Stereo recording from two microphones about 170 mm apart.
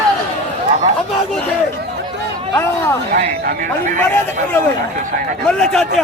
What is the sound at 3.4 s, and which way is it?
A man's voice, 55° right (ahead or behind).